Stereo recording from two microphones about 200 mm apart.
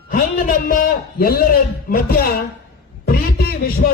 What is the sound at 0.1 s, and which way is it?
A man's voice, 45° left (ahead or behind).